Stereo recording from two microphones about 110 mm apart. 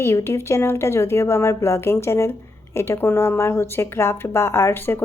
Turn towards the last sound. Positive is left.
turn(degrees=20)  # may be behind; listen again after turning